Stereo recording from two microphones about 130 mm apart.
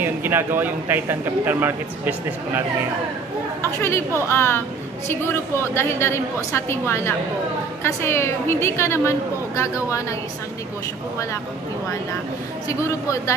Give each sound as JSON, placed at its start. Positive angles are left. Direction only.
{"t": 0.0, "sound": "speech", "side_deg": -15}
{"t": 3.8, "sound": "a woman's voice", "side_deg": 20}